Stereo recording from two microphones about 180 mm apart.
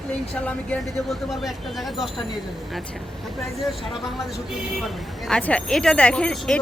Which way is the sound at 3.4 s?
Centre (ahead or behind).